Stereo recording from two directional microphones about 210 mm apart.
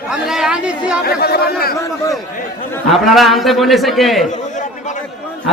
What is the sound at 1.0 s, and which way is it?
Speech, 45° left (ahead or behind).